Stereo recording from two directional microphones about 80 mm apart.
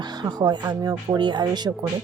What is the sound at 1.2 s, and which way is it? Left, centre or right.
Speech, right.